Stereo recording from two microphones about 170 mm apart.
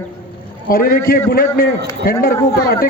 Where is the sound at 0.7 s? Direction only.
60° left (ahead or behind).